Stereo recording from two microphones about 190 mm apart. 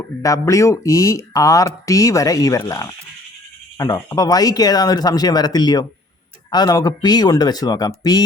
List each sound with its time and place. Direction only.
0.0 s speech: 15° left (ahead or behind)